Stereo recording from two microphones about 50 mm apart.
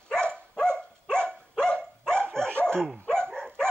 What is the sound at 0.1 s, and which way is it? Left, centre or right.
Dog, centre.